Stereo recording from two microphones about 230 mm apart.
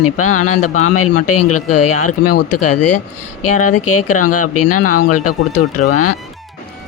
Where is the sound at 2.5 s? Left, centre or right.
Left.